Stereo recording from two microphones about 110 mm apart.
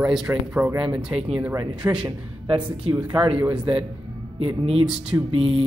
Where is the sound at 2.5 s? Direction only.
50° right (ahead or behind).